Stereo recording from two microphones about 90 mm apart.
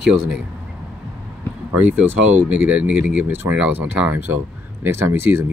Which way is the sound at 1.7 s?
20° right (ahead or behind).